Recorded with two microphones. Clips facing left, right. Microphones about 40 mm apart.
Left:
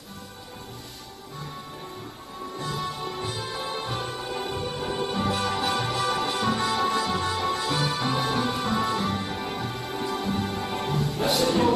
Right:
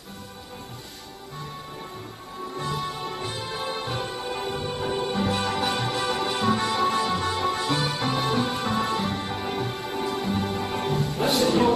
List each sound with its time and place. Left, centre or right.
3.3 s music: centre
7.5 s music: right
8.1 s music: centre